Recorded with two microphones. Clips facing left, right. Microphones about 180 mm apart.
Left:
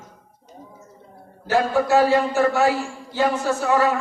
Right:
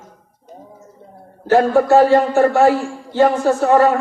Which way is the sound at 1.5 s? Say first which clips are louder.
Right 6 dB; 55° right (ahead or behind).